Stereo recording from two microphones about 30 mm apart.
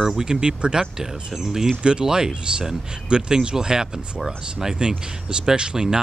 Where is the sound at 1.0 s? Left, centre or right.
Centre.